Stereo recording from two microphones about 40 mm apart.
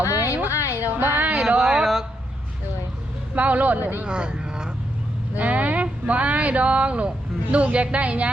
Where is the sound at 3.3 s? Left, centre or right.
Right.